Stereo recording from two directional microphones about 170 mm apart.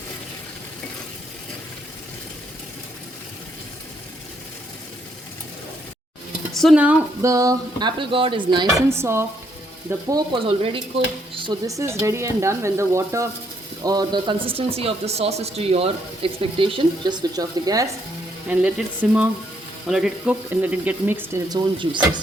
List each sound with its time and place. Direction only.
6.5 s speech: centre (ahead or behind)
7.3 s speech: 20° right (ahead or behind)
8.9 s speech: 15° right (ahead or behind)
10.1 s speech: 25° right (ahead or behind)
18.4 s speech: 5° right (ahead or behind)
21.5 s speech: 30° right (ahead or behind)